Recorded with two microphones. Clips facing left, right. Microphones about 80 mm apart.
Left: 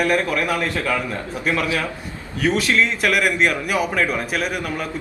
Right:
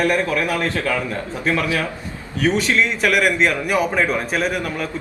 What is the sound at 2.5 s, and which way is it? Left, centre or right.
Speech, centre.